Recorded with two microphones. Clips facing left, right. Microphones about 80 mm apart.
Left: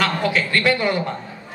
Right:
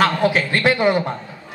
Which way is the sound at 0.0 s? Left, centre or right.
Right.